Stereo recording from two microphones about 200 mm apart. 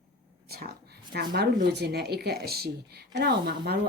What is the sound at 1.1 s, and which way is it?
Speech, 55° right (ahead or behind).